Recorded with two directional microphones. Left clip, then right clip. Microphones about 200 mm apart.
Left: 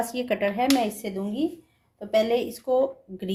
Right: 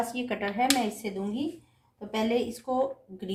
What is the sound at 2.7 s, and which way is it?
Speech, 55° left (ahead or behind).